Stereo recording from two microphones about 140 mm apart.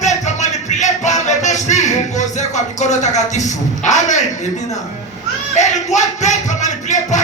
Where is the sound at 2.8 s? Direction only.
55° left (ahead or behind).